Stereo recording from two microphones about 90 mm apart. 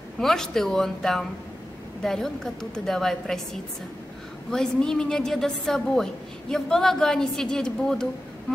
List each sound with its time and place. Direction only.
0.2 s a woman's voice: 5° left (ahead or behind)
4.5 s a woman's voice: 5° left (ahead or behind)